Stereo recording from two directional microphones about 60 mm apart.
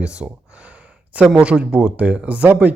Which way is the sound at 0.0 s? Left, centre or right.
Centre.